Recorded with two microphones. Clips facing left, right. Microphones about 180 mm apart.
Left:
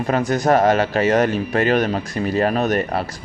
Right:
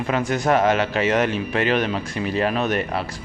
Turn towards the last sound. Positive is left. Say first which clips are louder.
# left 3 dB
turn(degrees=40)  # may be behind; listen again after turning